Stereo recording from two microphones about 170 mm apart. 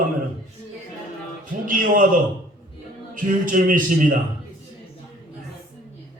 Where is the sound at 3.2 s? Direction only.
50° right (ahead or behind).